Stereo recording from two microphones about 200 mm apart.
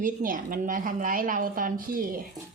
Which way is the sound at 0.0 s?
40° right (ahead or behind).